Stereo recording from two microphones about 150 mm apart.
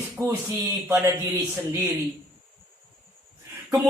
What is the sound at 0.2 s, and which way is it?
Speech, 15° right (ahead or behind).